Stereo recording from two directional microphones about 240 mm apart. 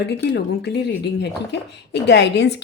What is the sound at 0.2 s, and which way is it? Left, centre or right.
A woman's voice, left.